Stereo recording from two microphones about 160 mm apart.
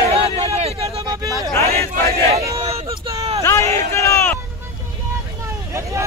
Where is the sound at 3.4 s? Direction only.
20° left (ahead or behind).